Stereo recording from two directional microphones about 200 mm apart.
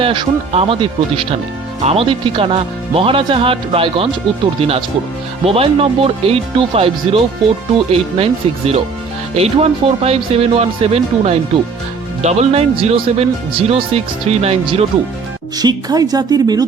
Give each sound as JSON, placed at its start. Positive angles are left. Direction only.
{"t": 0.0, "sound": "speech", "side_deg": -25}
{"t": 5.5, "sound": "speech", "side_deg": -30}